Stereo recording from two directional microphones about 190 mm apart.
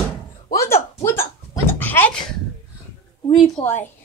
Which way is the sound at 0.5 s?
15° left (ahead or behind).